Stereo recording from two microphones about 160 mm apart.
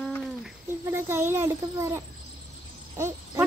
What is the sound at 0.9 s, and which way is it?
Speech, 15° right (ahead or behind).